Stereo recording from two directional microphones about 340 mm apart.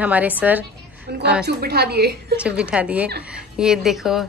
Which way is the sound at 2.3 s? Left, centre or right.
Centre.